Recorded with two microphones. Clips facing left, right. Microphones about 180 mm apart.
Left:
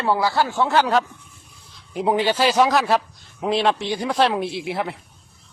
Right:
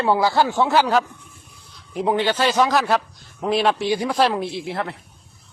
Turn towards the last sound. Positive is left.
turn(degrees=10)  # may be behind; listen again after turning